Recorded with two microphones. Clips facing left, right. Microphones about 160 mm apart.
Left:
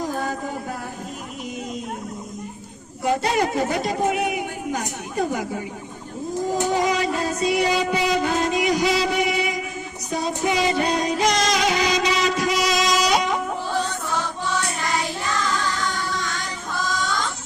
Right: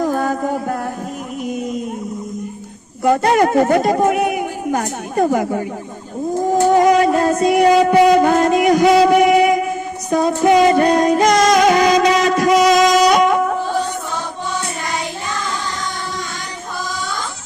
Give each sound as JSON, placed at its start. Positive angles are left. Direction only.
{"t": 0.0, "sound": "a sound", "side_deg": -55}
{"t": 3.0, "sound": "a woman's voice", "side_deg": -50}
{"t": 6.6, "sound": "music", "side_deg": -50}